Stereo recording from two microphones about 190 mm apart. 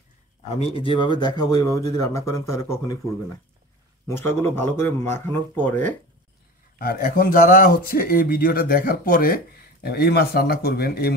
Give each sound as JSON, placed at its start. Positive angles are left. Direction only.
{"t": 0.6, "sound": "a man's voice", "side_deg": 30}
{"t": 4.1, "sound": "a man's voice", "side_deg": 15}
{"t": 6.8, "sound": "speech", "side_deg": 50}